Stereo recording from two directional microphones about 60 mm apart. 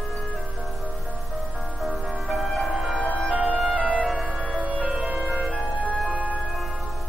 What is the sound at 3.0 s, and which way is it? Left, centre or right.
Music, centre.